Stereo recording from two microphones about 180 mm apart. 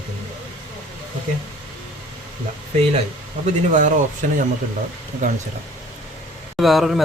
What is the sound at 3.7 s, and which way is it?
Speech, 45° right (ahead or behind).